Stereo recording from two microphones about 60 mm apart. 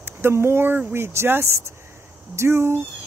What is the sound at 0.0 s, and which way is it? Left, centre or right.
Speech, right.